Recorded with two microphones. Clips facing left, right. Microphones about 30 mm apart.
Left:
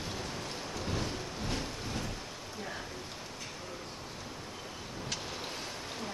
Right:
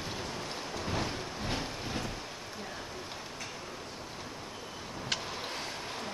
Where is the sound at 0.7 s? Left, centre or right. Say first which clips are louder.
Right 2 dB; centre.